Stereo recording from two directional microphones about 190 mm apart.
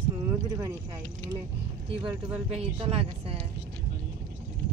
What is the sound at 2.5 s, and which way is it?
Speech, 30° right (ahead or behind).